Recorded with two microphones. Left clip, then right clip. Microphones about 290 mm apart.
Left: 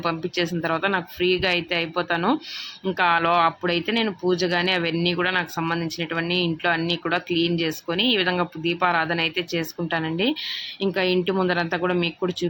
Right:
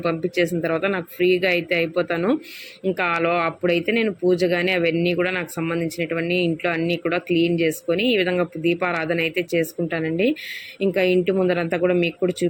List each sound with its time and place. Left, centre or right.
0.0 s speech: centre